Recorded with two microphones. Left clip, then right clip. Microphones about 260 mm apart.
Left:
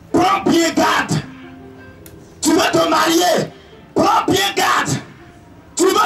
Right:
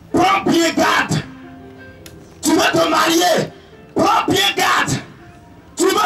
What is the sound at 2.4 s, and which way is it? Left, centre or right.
A man's voice, centre.